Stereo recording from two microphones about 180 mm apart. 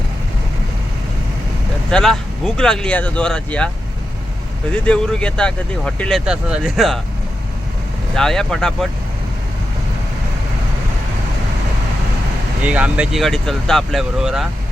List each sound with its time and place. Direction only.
1.9 s speech: centre (ahead or behind)
4.7 s speech: 5° left (ahead or behind)
8.1 s speech: 5° left (ahead or behind)
12.6 s speech: 5° right (ahead or behind)